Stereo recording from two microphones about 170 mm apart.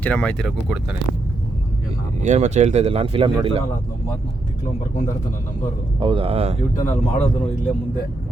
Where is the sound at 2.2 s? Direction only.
45° right (ahead or behind).